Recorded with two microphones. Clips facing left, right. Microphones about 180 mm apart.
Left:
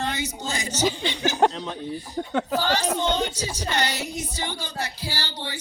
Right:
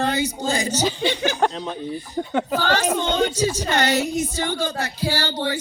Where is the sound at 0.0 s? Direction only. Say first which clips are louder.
Right 7 dB; 35° right (ahead or behind).